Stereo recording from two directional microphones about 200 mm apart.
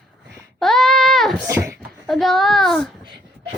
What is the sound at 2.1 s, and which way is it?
Speech, centre (ahead or behind).